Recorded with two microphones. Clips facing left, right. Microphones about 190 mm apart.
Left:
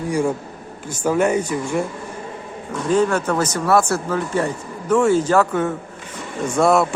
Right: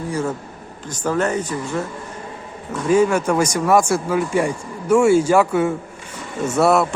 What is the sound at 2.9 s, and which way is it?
Speech, 10° right (ahead or behind).